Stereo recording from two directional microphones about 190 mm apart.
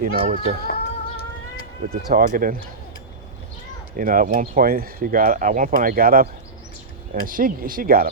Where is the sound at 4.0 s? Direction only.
45° right (ahead or behind).